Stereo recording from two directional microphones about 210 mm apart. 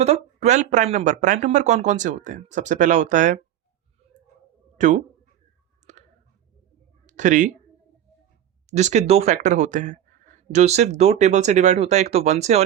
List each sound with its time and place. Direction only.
0.0 s speech: 30° right (ahead or behind)
4.8 s speech: 35° right (ahead or behind)
5.9 s clicking: 35° right (ahead or behind)
7.1 s speech: 35° right (ahead or behind)
8.6 s speech: 35° right (ahead or behind)